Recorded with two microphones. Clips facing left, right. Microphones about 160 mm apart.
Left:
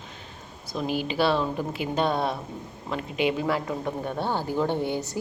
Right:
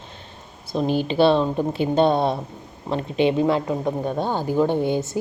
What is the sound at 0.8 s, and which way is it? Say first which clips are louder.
Speech: right 7 dB; 30° right (ahead or behind).